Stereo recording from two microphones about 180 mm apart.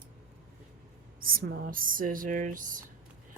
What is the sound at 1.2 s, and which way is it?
Speech, 55° right (ahead or behind).